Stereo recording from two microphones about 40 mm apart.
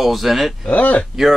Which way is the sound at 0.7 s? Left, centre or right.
Left.